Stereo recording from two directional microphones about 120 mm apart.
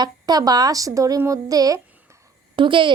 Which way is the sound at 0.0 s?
35° right (ahead or behind).